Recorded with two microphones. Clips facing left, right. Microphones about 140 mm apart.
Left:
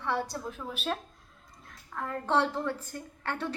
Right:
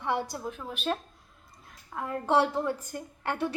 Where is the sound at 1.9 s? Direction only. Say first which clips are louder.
Right 3 dB; 15° right (ahead or behind).